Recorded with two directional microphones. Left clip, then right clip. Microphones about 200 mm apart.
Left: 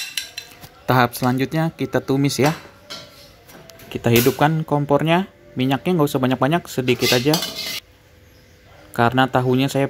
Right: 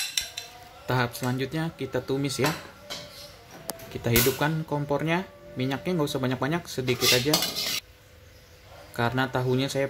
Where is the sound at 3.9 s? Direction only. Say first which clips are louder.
Left 7 dB; 25° left (ahead or behind).